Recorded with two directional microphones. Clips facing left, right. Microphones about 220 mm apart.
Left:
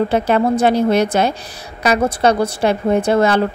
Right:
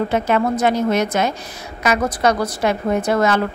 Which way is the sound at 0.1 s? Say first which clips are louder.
Left 3 dB; 30° left (ahead or behind).